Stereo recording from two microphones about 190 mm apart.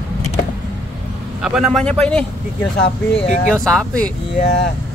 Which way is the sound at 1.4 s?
Centre (ahead or behind).